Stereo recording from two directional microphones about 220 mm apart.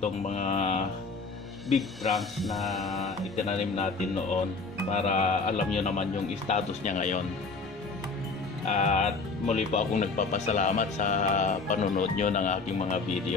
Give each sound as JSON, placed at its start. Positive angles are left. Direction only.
{"t": 0.0, "sound": "music", "side_deg": 30}
{"t": 1.7, "sound": "speech", "side_deg": 0}
{"t": 3.3, "sound": "music", "side_deg": 30}
{"t": 4.9, "sound": "speech", "side_deg": 30}
{"t": 8.6, "sound": "speech", "side_deg": 30}